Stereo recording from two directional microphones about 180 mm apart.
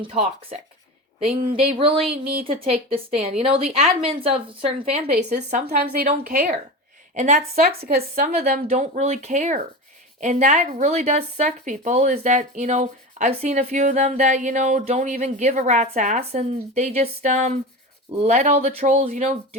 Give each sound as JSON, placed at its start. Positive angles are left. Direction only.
{"t": 0.0, "sound": "speech", "side_deg": -35}
{"t": 2.4, "sound": "speech", "side_deg": -30}
{"t": 5.0, "sound": "speech", "side_deg": -60}
{"t": 6.1, "sound": "a woman's voice", "side_deg": -45}
{"t": 8.6, "sound": "speech", "side_deg": -40}